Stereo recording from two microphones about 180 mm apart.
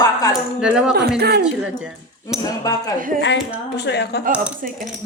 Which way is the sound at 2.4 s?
20° left (ahead or behind).